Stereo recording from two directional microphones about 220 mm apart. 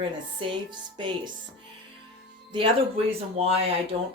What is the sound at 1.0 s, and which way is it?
Speech, 20° right (ahead or behind).